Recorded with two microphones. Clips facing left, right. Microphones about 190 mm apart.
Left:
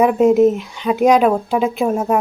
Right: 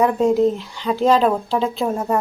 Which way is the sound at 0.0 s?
20° left (ahead or behind).